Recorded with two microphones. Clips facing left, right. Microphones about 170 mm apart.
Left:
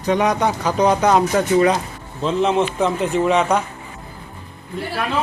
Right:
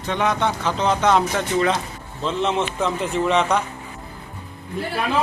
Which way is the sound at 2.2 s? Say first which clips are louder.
Left 4 dB; centre (ahead or behind).